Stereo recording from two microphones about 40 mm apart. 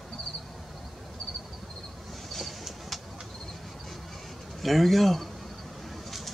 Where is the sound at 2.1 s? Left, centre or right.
Centre.